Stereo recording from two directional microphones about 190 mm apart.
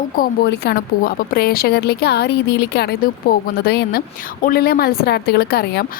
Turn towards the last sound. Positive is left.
turn(degrees=55)  # may be behind; listen again after turning